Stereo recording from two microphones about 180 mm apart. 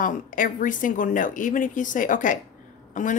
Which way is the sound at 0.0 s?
45° left (ahead or behind).